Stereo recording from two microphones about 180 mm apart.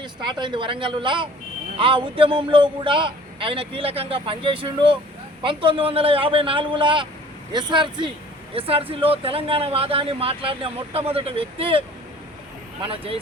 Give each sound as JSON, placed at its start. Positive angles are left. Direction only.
{"t": 0.0, "sound": "speech", "side_deg": -25}
{"t": 12.8, "sound": "speech", "side_deg": -30}